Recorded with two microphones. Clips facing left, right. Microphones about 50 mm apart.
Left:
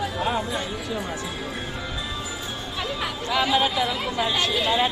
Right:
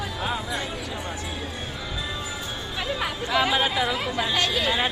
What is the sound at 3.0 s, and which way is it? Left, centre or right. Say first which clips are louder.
Speech: right 1 dB; centre.